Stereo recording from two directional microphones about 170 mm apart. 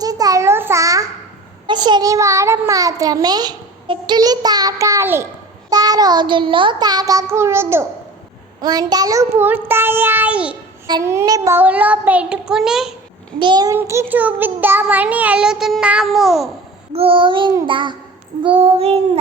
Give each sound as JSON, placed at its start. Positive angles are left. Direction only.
{"t": 0.0, "sound": "a sound", "side_deg": -20}
{"t": 1.6, "sound": "a child's voice", "side_deg": -25}
{"t": 8.6, "sound": "child singing", "side_deg": -25}
{"t": 10.8, "sound": "child singing", "side_deg": -20}
{"t": 13.4, "sound": "a child's voice", "side_deg": -25}
{"t": 13.7, "sound": "child singing", "side_deg": -15}
{"t": 16.9, "sound": "a child's voice", "side_deg": -35}
{"t": 18.4, "sound": "child singing", "side_deg": -35}